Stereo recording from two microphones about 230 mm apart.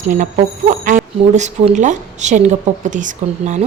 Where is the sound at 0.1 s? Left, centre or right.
Right.